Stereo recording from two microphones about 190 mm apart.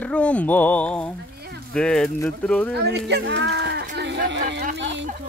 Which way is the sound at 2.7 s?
60° right (ahead or behind).